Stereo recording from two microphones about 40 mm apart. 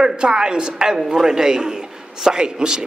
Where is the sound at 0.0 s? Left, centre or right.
Centre.